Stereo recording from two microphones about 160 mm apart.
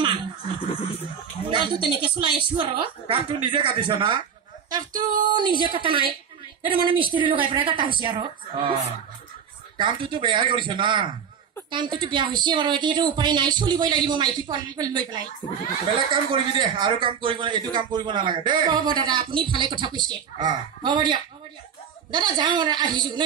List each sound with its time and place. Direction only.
0.0 s speech: 30° right (ahead or behind)
1.5 s a woman's voice: 30° right (ahead or behind)
9.8 s a woman's voice: 30° right (ahead or behind)